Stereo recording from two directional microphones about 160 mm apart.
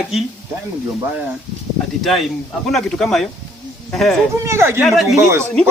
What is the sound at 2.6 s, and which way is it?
Speech, centre (ahead or behind).